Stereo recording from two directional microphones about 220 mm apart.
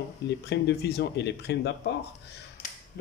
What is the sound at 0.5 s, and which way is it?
Speech, 50° left (ahead or behind).